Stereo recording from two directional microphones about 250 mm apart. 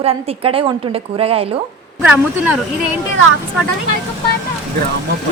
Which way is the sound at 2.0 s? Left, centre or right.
Centre.